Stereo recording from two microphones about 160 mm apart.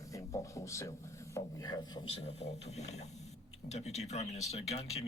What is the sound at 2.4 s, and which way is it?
Speech, 45° left (ahead or behind).